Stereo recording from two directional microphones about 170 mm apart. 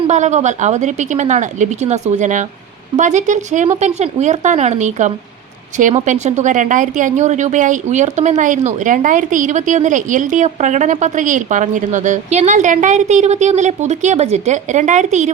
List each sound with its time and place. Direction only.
0.1 s a woman's voice: 45° right (ahead or behind)